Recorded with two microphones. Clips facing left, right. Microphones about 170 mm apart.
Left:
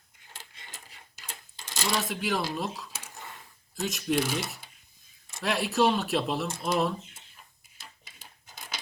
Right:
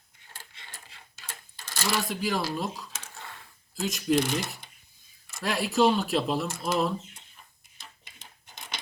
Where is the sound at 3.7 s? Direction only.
Centre (ahead or behind).